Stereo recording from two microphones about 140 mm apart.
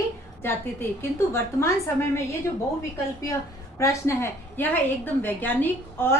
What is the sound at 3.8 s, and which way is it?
A woman's voice, 20° left (ahead or behind).